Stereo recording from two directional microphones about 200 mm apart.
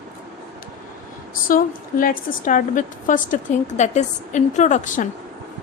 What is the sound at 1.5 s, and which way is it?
A woman's voice, 45° left (ahead or behind).